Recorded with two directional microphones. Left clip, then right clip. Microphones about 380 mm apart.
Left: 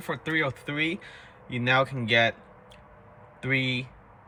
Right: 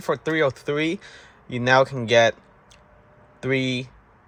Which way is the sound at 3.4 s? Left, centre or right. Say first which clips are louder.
Right 3 dB; centre.